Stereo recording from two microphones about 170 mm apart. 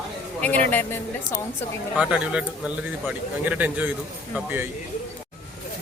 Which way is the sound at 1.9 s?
5° right (ahead or behind).